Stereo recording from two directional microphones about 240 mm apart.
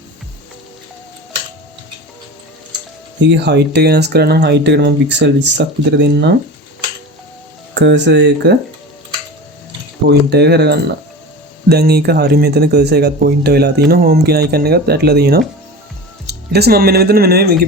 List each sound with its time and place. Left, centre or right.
3.2 s speech: right
7.7 s speech: right
10.1 s speech: right